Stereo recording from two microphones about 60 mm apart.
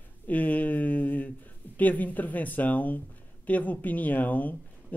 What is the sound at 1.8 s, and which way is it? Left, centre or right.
Speech, left.